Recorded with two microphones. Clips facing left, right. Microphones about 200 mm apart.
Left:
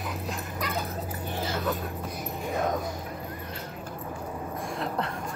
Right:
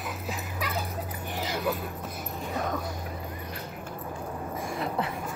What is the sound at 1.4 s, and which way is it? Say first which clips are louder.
Music: even; 15° right (ahead or behind).